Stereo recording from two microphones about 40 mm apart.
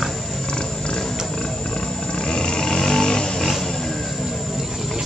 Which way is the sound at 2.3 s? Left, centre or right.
Left.